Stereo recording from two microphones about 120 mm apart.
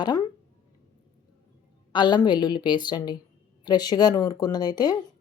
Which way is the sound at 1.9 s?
40° left (ahead or behind).